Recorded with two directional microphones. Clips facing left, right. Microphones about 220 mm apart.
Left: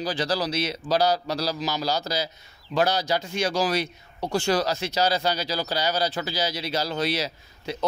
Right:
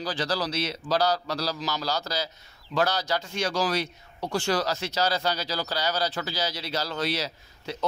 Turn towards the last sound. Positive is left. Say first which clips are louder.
# left 3 dB
turn(degrees=15)  # may be behind; listen again after turning